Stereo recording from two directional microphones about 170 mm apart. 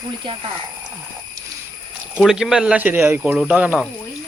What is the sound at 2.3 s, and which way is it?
Speech, 5° right (ahead or behind).